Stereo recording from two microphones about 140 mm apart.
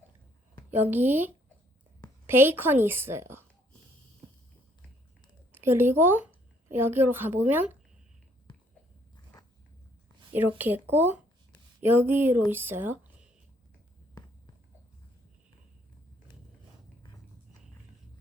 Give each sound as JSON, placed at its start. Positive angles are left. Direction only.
{"t": 0.7, "sound": "a woman's voice", "side_deg": -15}
{"t": 5.5, "sound": "a woman's voice", "side_deg": -15}
{"t": 9.3, "sound": "a sound", "side_deg": 25}
{"t": 10.6, "sound": "a woman's voice", "side_deg": -15}